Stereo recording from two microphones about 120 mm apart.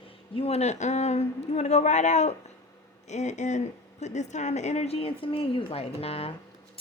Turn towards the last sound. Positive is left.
turn(degrees=55)  # may be behind; listen again after turning